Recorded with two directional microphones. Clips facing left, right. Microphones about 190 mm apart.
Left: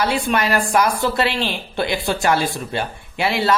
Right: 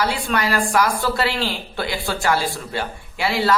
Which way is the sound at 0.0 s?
20° left (ahead or behind).